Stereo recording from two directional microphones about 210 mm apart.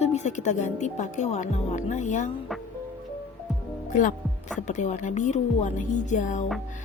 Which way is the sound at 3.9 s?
35° left (ahead or behind).